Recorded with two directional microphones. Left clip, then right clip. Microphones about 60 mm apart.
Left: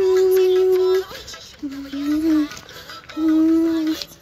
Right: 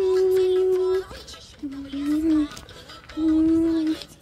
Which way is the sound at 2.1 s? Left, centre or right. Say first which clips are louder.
Left 3 dB; right.